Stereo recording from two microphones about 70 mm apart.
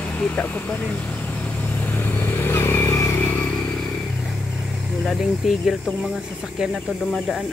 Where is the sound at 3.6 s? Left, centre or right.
Centre.